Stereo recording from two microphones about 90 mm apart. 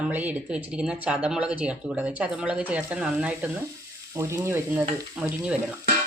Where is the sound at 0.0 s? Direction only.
20° right (ahead or behind).